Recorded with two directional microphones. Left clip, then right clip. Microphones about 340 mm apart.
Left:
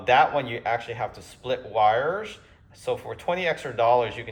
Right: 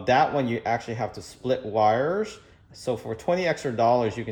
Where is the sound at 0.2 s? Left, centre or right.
Right.